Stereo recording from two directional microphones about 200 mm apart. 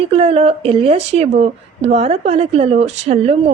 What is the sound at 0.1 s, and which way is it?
Speech, 30° right (ahead or behind).